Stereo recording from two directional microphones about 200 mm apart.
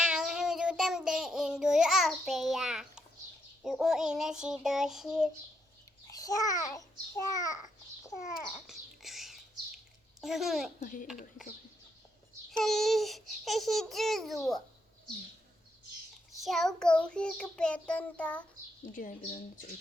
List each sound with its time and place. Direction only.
0.0 s child singing: 5° right (ahead or behind)
3.6 s babbling: centre (ahead or behind)
6.1 s a child's voice: 15° left (ahead or behind)
8.2 s babbling: centre (ahead or behind)
10.8 s a child's voice: 40° left (ahead or behind)
12.5 s babbling: centre (ahead or behind)
16.4 s babbling: centre (ahead or behind)